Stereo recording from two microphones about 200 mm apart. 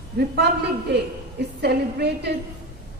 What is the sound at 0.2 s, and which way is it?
Speech, 50° right (ahead or behind).